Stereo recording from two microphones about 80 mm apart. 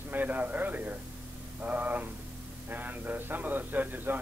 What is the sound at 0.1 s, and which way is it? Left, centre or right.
A man's voice, right.